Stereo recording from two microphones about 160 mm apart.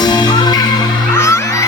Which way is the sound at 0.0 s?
25° left (ahead or behind).